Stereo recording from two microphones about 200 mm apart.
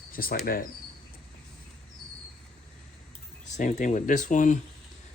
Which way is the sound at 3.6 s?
40° left (ahead or behind).